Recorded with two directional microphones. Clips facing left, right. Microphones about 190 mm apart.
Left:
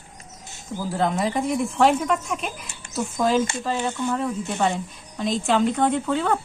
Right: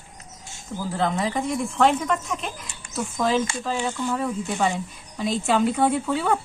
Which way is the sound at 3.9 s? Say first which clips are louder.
Left 1 dB; 20° left (ahead or behind).